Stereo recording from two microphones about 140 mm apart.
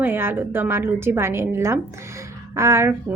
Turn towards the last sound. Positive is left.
turn(degrees=-15)  # may be behind; listen again after turning